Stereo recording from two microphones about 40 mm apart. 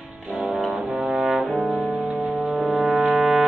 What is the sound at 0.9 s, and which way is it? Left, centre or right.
Brass instrument, right.